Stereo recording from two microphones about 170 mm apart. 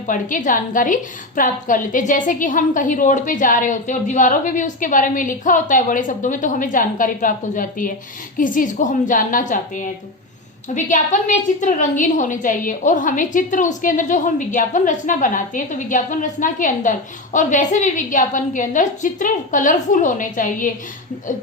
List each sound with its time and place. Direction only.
0.1 s a woman's voice: 50° left (ahead or behind)